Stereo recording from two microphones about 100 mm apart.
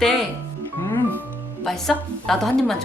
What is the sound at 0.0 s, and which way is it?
Speech, 5° left (ahead or behind).